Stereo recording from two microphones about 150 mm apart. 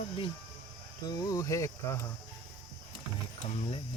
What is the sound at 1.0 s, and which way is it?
Speech, 25° left (ahead or behind).